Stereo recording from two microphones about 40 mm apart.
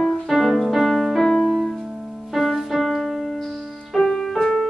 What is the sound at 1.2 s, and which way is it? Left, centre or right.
Music, centre.